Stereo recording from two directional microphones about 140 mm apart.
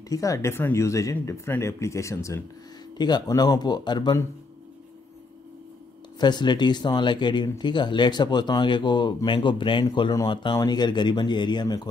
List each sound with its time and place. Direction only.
0.1 s speech: 25° left (ahead or behind)
3.0 s speech: 30° left (ahead or behind)
6.1 s speech: 30° left (ahead or behind)